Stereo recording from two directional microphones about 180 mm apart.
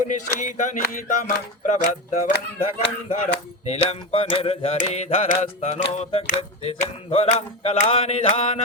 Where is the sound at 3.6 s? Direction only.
35° left (ahead or behind).